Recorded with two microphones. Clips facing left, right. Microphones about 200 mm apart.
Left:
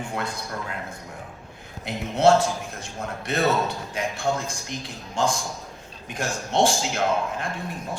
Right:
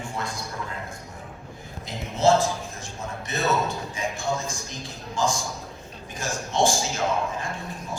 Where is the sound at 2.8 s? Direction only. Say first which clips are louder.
Left 2 dB; 65° left (ahead or behind).